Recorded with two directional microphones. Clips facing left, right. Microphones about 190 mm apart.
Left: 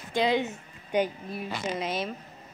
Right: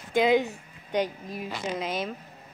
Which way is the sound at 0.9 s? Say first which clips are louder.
Left 1 dB; 10° left (ahead or behind).